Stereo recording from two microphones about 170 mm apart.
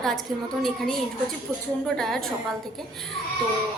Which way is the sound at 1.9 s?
Centre (ahead or behind).